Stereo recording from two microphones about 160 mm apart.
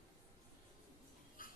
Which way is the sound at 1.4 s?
60° left (ahead or behind).